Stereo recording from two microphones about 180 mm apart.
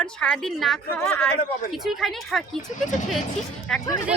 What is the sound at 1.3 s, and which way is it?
Speech, 55° left (ahead or behind).